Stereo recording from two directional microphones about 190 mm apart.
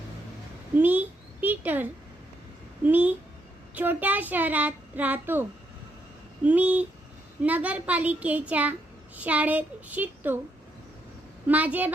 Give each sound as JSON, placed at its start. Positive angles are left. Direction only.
{"t": 0.8, "sound": "a sound", "side_deg": -10}
{"t": 2.8, "sound": "a child's voice", "side_deg": -10}
{"t": 11.4, "sound": "a child's voice", "side_deg": -10}